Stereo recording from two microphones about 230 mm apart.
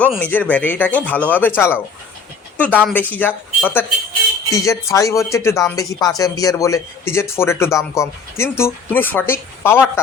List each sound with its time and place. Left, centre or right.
0.0 s speech: centre